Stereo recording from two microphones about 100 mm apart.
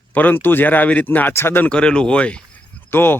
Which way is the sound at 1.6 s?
10° left (ahead or behind).